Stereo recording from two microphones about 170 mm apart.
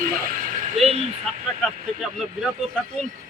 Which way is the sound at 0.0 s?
55° right (ahead or behind).